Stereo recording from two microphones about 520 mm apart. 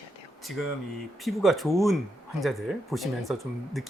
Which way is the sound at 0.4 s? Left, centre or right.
Centre.